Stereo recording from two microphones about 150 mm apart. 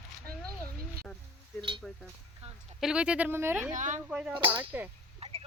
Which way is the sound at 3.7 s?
55° right (ahead or behind).